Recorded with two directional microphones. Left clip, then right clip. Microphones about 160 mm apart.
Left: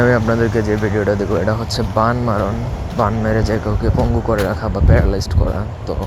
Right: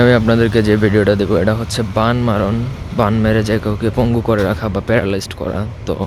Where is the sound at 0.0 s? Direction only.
40° right (ahead or behind).